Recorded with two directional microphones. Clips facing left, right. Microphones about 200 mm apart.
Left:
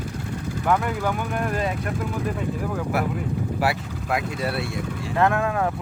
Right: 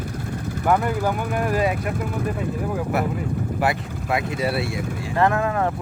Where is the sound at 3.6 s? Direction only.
Centre (ahead or behind).